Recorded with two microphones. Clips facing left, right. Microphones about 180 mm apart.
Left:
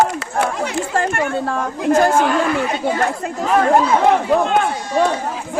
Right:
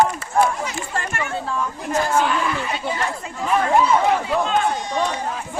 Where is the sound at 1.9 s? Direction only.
50° left (ahead or behind).